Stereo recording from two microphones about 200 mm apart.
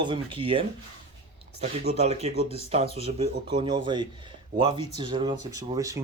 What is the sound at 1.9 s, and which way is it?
Speech, 30° right (ahead or behind).